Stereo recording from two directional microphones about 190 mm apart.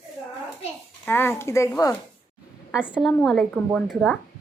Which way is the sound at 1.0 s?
10° left (ahead or behind).